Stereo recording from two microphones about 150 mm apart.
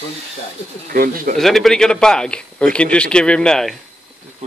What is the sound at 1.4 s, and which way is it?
A man's voice, centre (ahead or behind).